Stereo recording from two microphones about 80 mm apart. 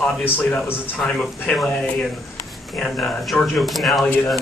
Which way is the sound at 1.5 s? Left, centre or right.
Centre.